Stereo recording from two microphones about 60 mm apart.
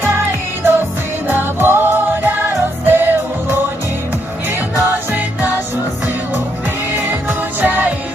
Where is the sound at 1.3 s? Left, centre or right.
Right.